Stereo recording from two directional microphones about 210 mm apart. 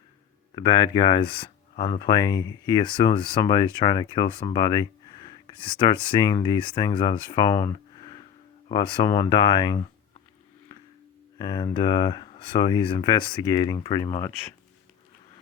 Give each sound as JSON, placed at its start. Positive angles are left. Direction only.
{"t": 0.5, "sound": "speech", "side_deg": 20}
{"t": 8.7, "sound": "speech", "side_deg": 15}
{"t": 11.3, "sound": "speech", "side_deg": 20}